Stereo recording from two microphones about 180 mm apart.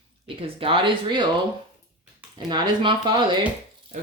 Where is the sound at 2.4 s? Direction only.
25° right (ahead or behind).